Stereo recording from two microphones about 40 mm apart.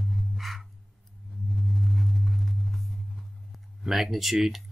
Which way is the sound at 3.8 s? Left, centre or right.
Centre.